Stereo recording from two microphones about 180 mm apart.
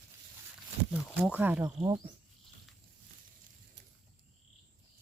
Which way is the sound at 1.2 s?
10° right (ahead or behind).